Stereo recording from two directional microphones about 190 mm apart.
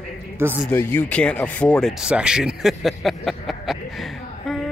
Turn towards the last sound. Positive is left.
turn(degrees=0)  # may be behind; listen again after turning